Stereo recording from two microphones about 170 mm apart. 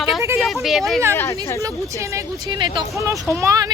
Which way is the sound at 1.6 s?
20° right (ahead or behind).